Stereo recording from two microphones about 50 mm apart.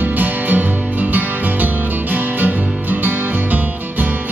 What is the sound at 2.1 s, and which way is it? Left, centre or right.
Music, right.